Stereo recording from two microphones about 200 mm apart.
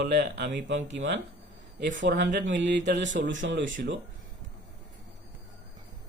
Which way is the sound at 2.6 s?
60° right (ahead or behind).